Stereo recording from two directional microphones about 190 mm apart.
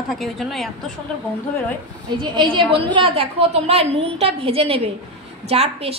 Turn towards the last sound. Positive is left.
turn(degrees=-30)  # may be behind; listen again after turning